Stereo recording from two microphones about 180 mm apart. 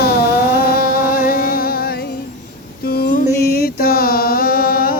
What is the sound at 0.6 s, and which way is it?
Music, 55° left (ahead or behind).